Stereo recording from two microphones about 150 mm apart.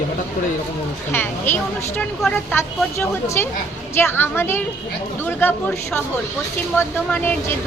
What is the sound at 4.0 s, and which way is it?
Speech, 15° left (ahead or behind).